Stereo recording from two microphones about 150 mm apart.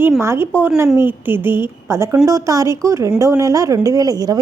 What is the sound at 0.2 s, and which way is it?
A woman's voice, 15° right (ahead or behind).